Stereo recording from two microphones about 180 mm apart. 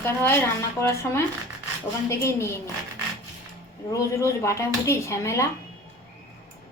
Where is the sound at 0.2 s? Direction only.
15° left (ahead or behind).